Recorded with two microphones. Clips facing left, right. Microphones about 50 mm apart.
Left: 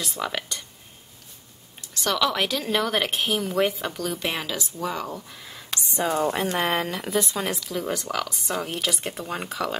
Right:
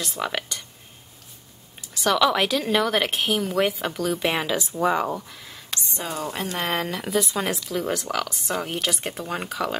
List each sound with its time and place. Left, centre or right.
0.0 s speech: centre
1.8 s a woman's voice: centre
4.3 s speech: centre
5.3 s a sound: centre
6.0 s speech: left
6.6 s a woman's voice: centre